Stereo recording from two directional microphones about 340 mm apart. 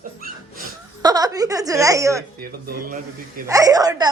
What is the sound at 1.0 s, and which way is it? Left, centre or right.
Speech, centre.